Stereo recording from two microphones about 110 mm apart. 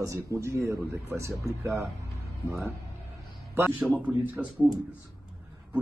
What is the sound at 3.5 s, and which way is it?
Speech, 20° right (ahead or behind).